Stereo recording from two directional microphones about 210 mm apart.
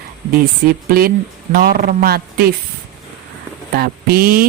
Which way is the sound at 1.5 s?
45° right (ahead or behind).